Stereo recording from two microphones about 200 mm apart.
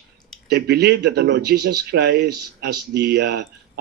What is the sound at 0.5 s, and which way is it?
A man's voice, 55° right (ahead or behind).